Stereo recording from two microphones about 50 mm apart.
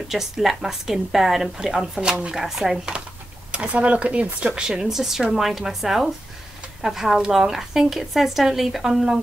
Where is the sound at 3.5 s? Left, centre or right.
Right.